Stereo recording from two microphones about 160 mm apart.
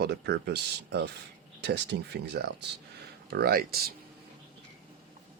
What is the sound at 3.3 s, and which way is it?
Speech, 75° right (ahead or behind).